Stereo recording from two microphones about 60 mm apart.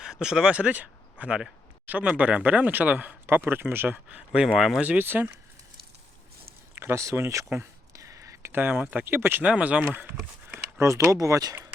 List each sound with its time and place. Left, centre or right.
0.0 s speech: centre
3.2 s speech: right
4.5 s speech: centre
4.8 s speech: right
5.0 s speech: right
6.9 s speech: right
7.9 s a sound: right
8.6 s speech: right
9.0 s speech: right
9.4 s speech: right
9.9 s speech: right
10.8 s speech: right